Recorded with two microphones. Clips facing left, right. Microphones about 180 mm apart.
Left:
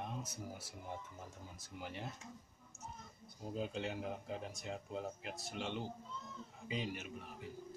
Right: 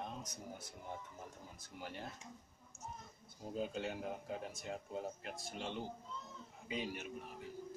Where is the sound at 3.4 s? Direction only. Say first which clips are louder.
Even; centre (ahead or behind).